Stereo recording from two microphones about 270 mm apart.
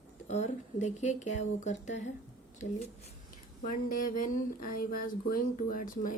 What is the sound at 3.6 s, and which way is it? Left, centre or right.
Speech, left.